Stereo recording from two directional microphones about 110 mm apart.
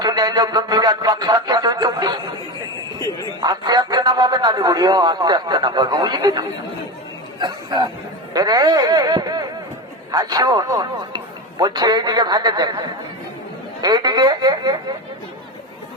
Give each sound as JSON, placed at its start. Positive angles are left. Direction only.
{"t": 0.0, "sound": "a man's voice", "side_deg": -40}
{"t": 13.8, "sound": "a man's voice", "side_deg": -40}